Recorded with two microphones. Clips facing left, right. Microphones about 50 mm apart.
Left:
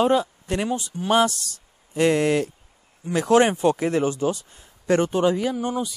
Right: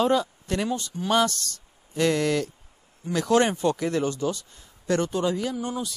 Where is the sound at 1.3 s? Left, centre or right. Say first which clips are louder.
Right 1 dB; right.